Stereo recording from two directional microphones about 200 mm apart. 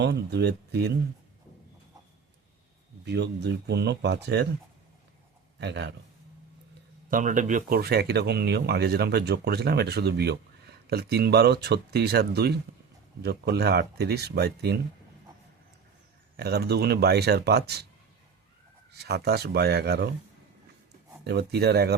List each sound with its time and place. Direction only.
0.0 s speech: 55° right (ahead or behind)
3.0 s speech: 60° right (ahead or behind)
5.5 s speech: 60° right (ahead or behind)
7.1 s speech: 40° right (ahead or behind)
16.4 s speech: 55° right (ahead or behind)
19.0 s speech: 55° right (ahead or behind)
21.2 s speech: 55° right (ahead or behind)